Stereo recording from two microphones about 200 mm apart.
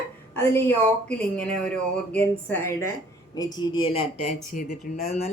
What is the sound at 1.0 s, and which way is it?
Speech, 5° left (ahead or behind).